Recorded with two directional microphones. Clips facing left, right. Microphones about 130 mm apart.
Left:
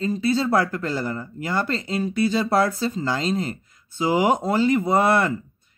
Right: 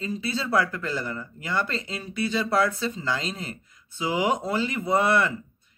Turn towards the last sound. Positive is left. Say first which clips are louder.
# left 3 dB
turn(degrees=40)  # may be behind; listen again after turning